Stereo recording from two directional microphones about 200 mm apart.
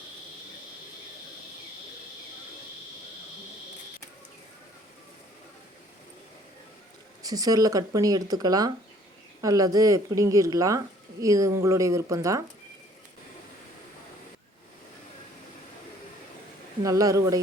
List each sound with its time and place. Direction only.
7.2 s speech: 15° right (ahead or behind)
16.8 s speech: 15° right (ahead or behind)